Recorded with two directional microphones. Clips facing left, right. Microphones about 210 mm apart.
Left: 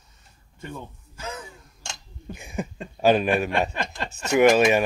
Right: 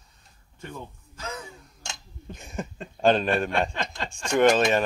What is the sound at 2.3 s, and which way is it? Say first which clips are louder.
Speech: left 3 dB; 10° left (ahead or behind).